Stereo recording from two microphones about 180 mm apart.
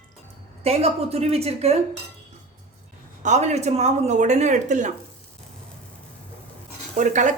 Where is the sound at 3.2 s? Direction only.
40° right (ahead or behind).